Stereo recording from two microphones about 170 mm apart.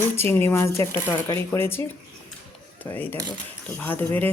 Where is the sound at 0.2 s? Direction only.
15° left (ahead or behind).